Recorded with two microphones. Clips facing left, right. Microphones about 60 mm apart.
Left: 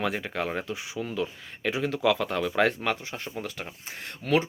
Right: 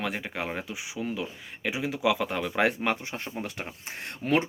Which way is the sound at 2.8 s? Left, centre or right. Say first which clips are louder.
Right 1 dB; right.